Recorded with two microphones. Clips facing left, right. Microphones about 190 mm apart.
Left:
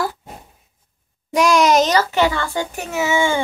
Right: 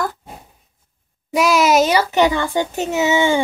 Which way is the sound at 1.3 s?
5° right (ahead or behind).